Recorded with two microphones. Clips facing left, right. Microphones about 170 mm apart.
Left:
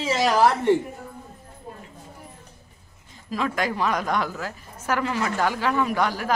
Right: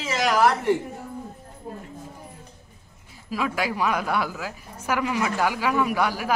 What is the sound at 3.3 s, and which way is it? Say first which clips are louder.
A woman's voice: left 1 dB; 10° right (ahead or behind).